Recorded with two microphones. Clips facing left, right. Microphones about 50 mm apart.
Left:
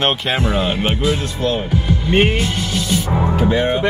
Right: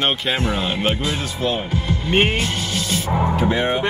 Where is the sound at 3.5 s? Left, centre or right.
Centre.